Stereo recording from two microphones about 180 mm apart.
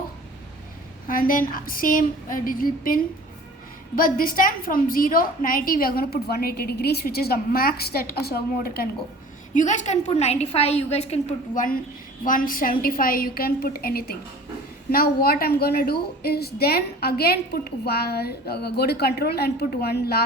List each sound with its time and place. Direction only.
1.0 s a woman's voice: 50° left (ahead or behind)
9.6 s a woman's voice: 40° left (ahead or behind); by 20.2 s 60° left (ahead or behind)